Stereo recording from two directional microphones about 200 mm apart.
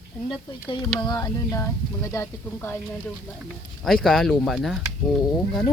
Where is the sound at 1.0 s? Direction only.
20° left (ahead or behind); by 5.6 s centre (ahead or behind).